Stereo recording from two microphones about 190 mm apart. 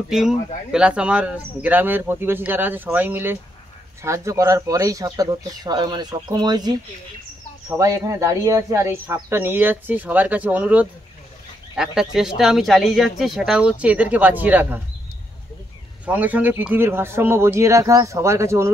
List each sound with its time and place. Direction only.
0.7 s speech: 5° right (ahead or behind)
16.1 s speech: 10° right (ahead or behind)